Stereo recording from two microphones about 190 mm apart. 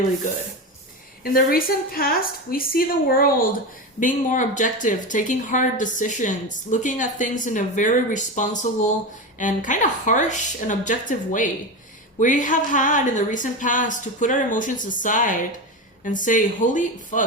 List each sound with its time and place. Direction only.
1.2 s a woman's voice: 50° left (ahead or behind)